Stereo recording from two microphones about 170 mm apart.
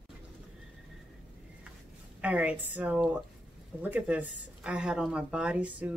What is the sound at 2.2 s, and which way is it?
Speech, 10° right (ahead or behind).